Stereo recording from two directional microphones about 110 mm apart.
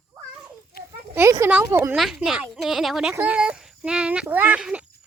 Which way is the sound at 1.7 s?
25° right (ahead or behind).